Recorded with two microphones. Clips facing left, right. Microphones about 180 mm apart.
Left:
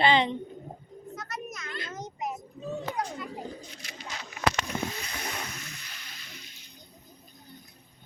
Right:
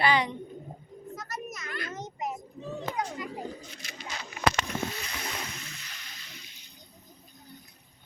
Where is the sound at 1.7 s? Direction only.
25° left (ahead or behind).